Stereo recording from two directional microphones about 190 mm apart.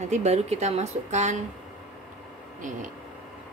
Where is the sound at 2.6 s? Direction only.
40° right (ahead or behind).